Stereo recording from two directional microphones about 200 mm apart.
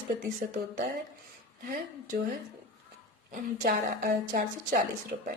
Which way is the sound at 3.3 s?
50° right (ahead or behind).